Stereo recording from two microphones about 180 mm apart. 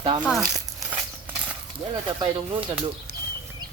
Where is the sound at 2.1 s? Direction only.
25° right (ahead or behind).